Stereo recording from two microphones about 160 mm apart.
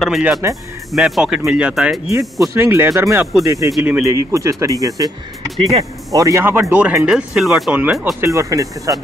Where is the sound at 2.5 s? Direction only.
15° right (ahead or behind).